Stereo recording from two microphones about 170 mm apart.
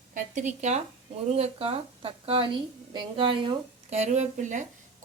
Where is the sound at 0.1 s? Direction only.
45° right (ahead or behind).